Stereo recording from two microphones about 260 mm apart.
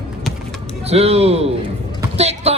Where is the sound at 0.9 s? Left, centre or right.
Right.